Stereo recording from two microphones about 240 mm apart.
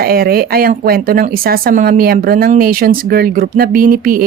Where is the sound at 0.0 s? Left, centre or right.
Right.